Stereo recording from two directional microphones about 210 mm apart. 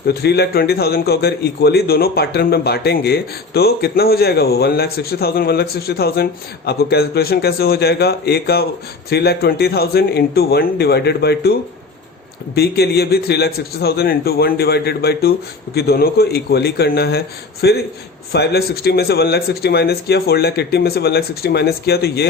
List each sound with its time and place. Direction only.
0.1 s a man's voice: 50° left (ahead or behind)
12.5 s a man's voice: 50° left (ahead or behind)